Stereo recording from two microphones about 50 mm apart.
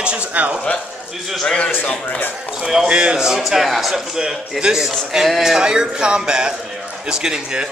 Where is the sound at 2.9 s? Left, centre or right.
Centre.